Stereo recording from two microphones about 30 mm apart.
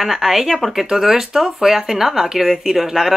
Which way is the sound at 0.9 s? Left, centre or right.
Centre.